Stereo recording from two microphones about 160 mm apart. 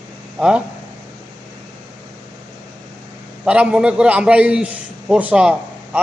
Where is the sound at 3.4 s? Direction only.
5° right (ahead or behind).